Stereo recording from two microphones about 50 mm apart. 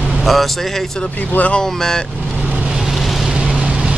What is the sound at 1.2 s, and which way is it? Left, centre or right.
Speech, left.